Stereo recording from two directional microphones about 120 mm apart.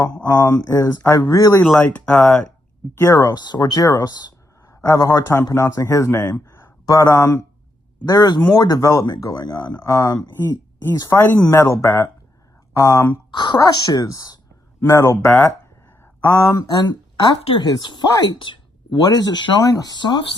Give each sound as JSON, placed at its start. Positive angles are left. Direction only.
{"t": 0.3, "sound": "speech", "side_deg": 20}
{"t": 1.8, "sound": "speech", "side_deg": 10}
{"t": 2.9, "sound": "speech", "side_deg": 20}
{"t": 6.5, "sound": "a sound", "side_deg": 25}
{"t": 8.0, "sound": "speech", "side_deg": 35}
{"t": 11.2, "sound": "speech", "side_deg": 10}
{"t": 11.5, "sound": "speech", "side_deg": 25}
{"t": 13.3, "sound": "speech", "side_deg": 40}
{"t": 17.4, "sound": "speech", "side_deg": 45}